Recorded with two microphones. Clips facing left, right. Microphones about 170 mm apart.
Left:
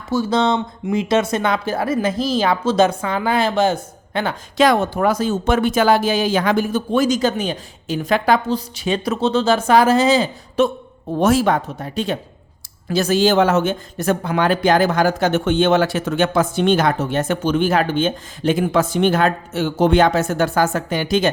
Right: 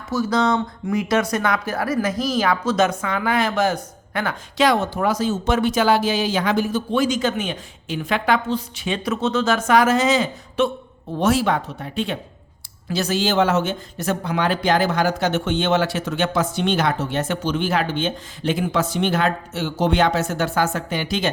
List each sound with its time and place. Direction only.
0.1 s speech: 25° left (ahead or behind)
4.5 s speech: 50° left (ahead or behind); by 10.7 s 35° left (ahead or behind)
11.2 s speech: 45° left (ahead or behind)